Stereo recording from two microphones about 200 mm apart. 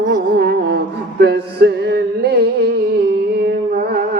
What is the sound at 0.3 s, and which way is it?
Music, 50° right (ahead or behind).